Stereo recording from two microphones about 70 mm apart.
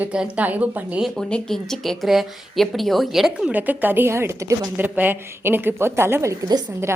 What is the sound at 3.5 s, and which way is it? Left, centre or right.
A woman's voice, right.